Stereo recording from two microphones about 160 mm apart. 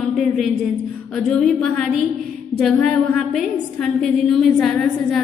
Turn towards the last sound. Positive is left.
turn(degrees=5)  # may be behind; listen again after turning